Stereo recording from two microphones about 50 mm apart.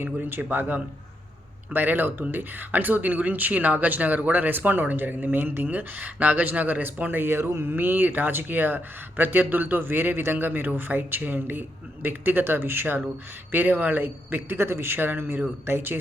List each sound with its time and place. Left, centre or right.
0.0 s a man's voice: right